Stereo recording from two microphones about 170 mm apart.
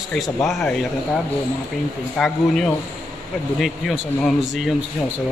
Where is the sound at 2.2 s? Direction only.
Centre (ahead or behind).